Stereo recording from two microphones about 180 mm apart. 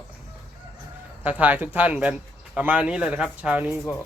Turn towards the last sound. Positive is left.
turn(degrees=-5)  # may be behind; listen again after turning